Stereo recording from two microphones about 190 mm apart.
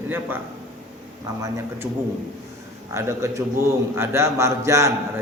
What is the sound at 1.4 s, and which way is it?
Speech, 15° right (ahead or behind).